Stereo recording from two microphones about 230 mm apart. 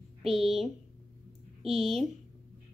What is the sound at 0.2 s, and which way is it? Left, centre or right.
Speech, centre.